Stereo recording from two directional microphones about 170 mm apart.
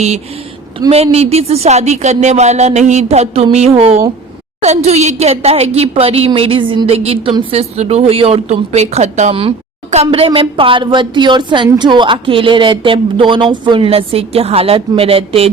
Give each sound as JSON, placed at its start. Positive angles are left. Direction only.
{"t": 0.9, "sound": "a woman's voice", "side_deg": -35}